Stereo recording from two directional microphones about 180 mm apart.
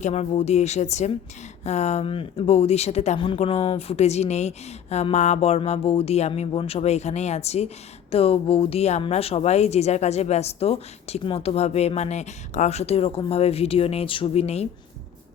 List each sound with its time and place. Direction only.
0.0 s a woman's voice: 35° left (ahead or behind)